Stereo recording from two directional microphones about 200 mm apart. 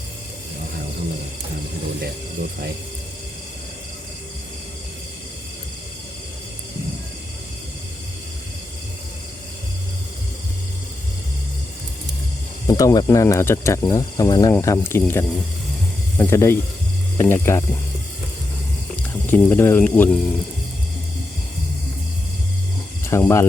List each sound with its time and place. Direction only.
12.6 s speech: 20° left (ahead or behind)
19.2 s speech: 10° left (ahead or behind)
23.0 s speech: 15° left (ahead or behind)